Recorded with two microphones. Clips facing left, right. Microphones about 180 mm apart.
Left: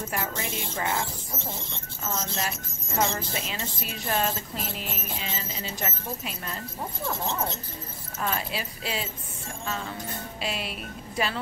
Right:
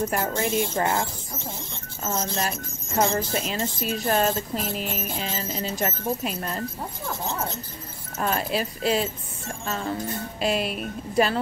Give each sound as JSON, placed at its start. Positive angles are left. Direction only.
{"t": 0.1, "sound": "speech", "side_deg": -35}
{"t": 2.0, "sound": "speech", "side_deg": -35}
{"t": 8.2, "sound": "speech", "side_deg": -45}